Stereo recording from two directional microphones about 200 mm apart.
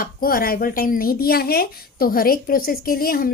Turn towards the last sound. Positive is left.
turn(degrees=45)  # may be behind; listen again after turning